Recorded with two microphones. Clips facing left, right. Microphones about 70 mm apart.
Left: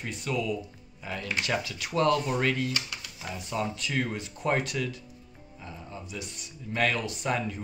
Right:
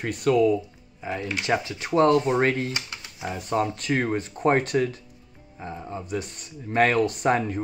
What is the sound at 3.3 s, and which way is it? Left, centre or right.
Speech, right.